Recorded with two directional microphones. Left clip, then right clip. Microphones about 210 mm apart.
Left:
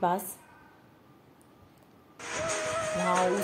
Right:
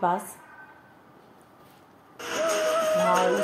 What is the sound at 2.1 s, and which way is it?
Music, 35° right (ahead or behind).